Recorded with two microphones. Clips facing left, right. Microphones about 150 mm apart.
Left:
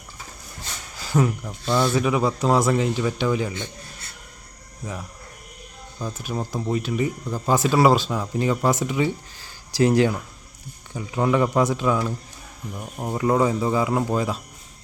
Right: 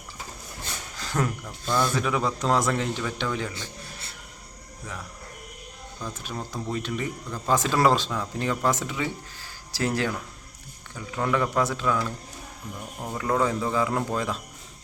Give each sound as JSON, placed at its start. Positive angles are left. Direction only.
{"t": 0.9, "sound": "speech", "side_deg": 10}
{"t": 3.5, "sound": "a sound", "side_deg": -35}
{"t": 6.0, "sound": "speech", "side_deg": 15}